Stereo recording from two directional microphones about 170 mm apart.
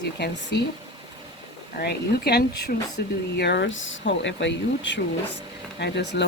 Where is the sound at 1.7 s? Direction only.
70° left (ahead or behind).